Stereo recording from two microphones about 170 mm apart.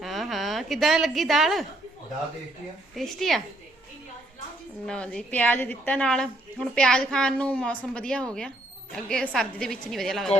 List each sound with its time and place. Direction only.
0.0 s a woman's voice: centre (ahead or behind)
2.9 s a woman's voice: centre (ahead or behind)
4.9 s a woman's voice: 5° left (ahead or behind)